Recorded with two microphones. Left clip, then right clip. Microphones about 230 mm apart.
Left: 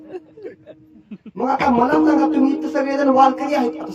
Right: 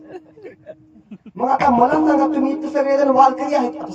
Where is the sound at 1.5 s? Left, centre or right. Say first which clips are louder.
Right 2 dB; left.